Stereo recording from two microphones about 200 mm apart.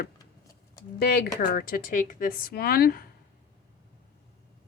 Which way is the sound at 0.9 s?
50° left (ahead or behind).